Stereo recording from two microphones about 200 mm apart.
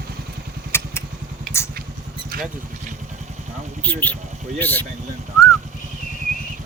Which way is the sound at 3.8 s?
10° left (ahead or behind).